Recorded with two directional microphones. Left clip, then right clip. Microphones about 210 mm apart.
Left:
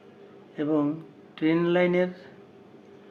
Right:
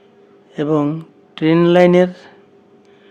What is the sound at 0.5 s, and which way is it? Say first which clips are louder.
Speech: right 9 dB; 50° right (ahead or behind).